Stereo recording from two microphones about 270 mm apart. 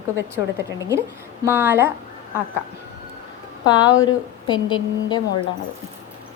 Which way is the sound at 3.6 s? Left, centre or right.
Centre.